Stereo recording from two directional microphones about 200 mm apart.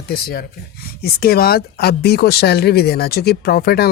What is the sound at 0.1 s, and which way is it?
Speech, 50° left (ahead or behind).